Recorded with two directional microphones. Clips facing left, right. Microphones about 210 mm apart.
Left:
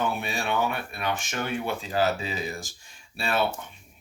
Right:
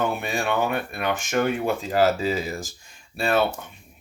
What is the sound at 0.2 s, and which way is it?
Speech, 50° right (ahead or behind).